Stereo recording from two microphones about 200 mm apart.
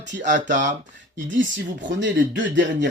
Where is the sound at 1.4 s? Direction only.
65° right (ahead or behind).